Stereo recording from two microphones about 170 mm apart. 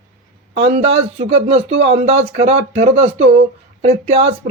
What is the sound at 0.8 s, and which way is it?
Speech, 35° right (ahead or behind).